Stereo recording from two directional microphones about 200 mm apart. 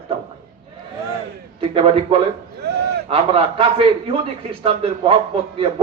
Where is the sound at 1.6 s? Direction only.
30° right (ahead or behind).